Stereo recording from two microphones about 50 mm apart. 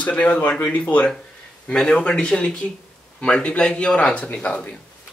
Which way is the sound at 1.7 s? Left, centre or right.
Centre.